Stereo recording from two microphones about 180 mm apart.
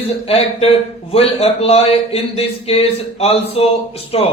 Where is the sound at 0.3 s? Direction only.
35° left (ahead or behind).